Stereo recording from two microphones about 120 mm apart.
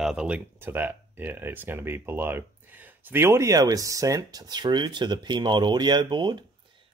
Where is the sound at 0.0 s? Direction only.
5° right (ahead or behind).